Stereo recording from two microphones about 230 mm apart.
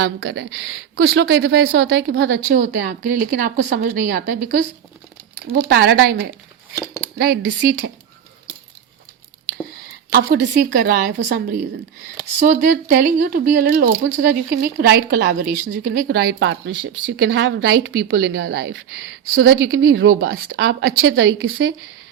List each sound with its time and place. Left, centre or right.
0.2 s a woman's voice: right
2.0 s a woman's voice: right
10.1 s a woman's voice: right
16.2 s a woman's voice: right
19.9 s speech: right